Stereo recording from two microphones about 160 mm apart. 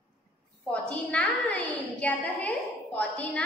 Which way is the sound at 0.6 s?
5° left (ahead or behind).